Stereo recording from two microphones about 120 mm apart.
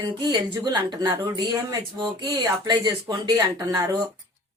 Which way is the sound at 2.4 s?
35° right (ahead or behind).